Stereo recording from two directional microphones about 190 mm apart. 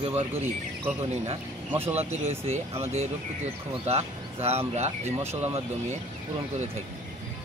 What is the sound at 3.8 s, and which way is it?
Speech, 35° right (ahead or behind).